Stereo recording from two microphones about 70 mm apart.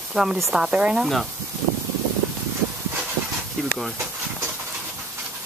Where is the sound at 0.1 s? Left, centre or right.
Centre.